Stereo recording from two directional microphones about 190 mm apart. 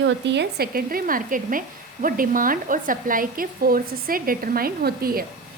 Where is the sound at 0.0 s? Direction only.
65° right (ahead or behind).